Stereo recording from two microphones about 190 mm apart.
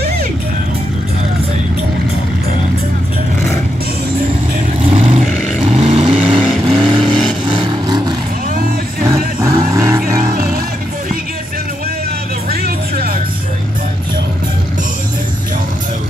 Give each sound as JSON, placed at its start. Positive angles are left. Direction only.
{"t": 4.8, "sound": "vehicle", "side_deg": -35}
{"t": 6.0, "sound": "vehicle", "side_deg": 0}
{"t": 7.8, "sound": "vehicle", "side_deg": -20}
{"t": 12.4, "sound": "music", "side_deg": -50}